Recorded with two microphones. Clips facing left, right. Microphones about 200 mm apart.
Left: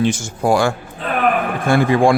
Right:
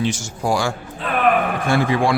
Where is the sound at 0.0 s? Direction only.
55° left (ahead or behind).